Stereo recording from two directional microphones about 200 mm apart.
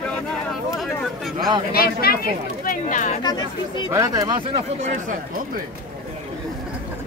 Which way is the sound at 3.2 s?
20° left (ahead or behind).